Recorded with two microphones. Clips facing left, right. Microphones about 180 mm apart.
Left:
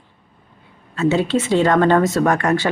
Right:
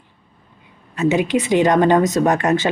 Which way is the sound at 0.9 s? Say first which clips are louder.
Even; 15° right (ahead or behind).